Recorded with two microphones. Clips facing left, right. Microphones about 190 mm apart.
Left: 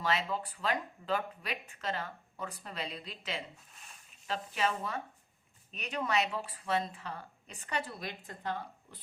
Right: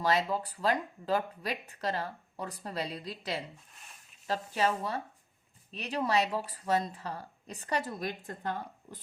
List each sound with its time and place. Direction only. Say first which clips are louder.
0.0 s speech: right 4 dB; 40° right (ahead or behind)